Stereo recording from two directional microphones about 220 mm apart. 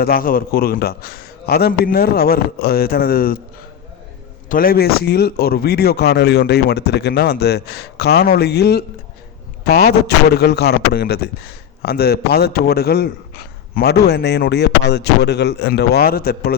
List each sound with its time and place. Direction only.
0.0 s a man's voice: 40° left (ahead or behind)
4.4 s a man's voice: 40° left (ahead or behind)